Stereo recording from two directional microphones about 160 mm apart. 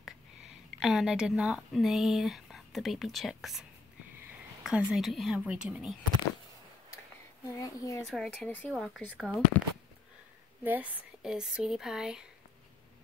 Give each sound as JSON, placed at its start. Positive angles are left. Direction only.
{"t": 0.7, "sound": "speech", "side_deg": 0}
{"t": 4.2, "sound": "a sound", "side_deg": -10}
{"t": 4.9, "sound": "speech", "side_deg": 0}
{"t": 7.4, "sound": "speech", "side_deg": 20}
{"t": 8.1, "sound": "speech", "side_deg": 0}
{"t": 8.5, "sound": "speech", "side_deg": 10}
{"t": 8.7, "sound": "speech", "side_deg": 0}
{"t": 10.6, "sound": "speech", "side_deg": -10}